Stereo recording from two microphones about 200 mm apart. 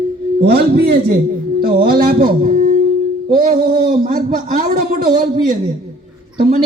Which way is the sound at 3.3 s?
45° right (ahead or behind).